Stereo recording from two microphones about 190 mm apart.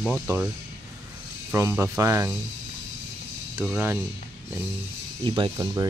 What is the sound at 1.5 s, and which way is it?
Speech, 15° right (ahead or behind).